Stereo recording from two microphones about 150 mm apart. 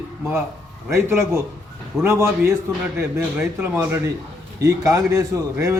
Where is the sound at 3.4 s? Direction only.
10° right (ahead or behind).